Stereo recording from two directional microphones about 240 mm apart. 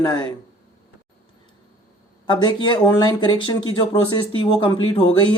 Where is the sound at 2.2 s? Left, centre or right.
Centre.